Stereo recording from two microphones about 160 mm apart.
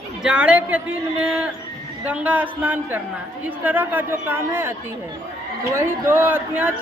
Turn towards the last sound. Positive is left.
turn(degrees=-10)  # may be behind; listen again after turning